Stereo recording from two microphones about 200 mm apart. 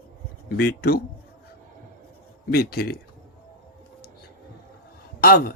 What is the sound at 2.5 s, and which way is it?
Speech, 50° left (ahead or behind).